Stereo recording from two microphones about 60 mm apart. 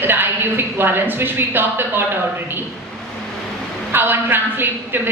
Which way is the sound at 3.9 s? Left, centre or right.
Right.